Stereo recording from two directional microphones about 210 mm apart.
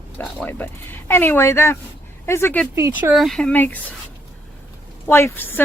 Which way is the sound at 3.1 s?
Centre (ahead or behind).